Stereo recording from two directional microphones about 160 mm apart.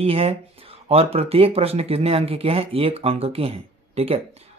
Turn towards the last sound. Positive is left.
turn(degrees=-40)  # may be behind; listen again after turning